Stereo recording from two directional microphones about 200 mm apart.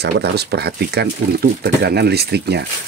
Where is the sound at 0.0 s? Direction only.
55° right (ahead or behind).